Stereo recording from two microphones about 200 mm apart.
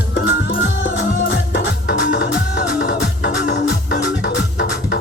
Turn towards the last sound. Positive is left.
turn(degrees=65)  # may be behind; listen again after turning